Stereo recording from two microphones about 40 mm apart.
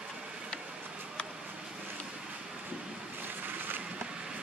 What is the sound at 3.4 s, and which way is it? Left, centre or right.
Boat, right.